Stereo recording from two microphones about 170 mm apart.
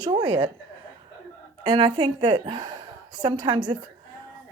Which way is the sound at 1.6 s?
25° right (ahead or behind).